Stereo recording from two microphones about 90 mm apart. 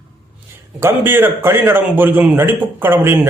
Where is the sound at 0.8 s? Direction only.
25° right (ahead or behind).